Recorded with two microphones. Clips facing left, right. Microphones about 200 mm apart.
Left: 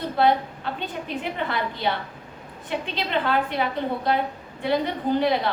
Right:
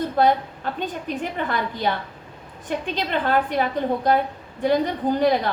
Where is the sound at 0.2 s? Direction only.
45° right (ahead or behind).